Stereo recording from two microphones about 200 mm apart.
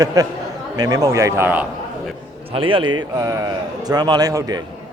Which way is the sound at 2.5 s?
25° right (ahead or behind).